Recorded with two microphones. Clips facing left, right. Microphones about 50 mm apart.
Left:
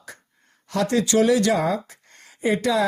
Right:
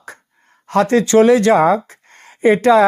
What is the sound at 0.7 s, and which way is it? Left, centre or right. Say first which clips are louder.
Speech: right 8 dB; right.